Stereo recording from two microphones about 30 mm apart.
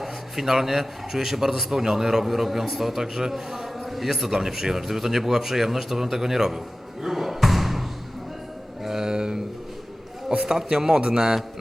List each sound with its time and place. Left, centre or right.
0.0 s a man's voice: centre
7.0 s slam: centre
8.8 s music: centre
9.0 s a sound: right
10.4 s a man's voice: centre